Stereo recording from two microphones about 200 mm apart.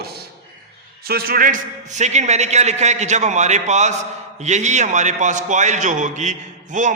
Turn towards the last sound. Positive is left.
turn(degrees=-40)  # may be behind; listen again after turning